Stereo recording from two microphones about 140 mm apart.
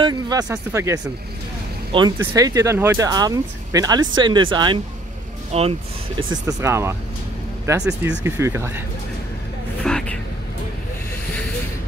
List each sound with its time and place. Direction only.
0.0 s speech: 30° right (ahead or behind)
1.9 s speech: 35° right (ahead or behind)
2.1 s speech: 25° right (ahead or behind); by 6.2 s 45° right (ahead or behind)
6.4 s speech: 20° right (ahead or behind)
9.8 s vehicle: 5° left (ahead or behind)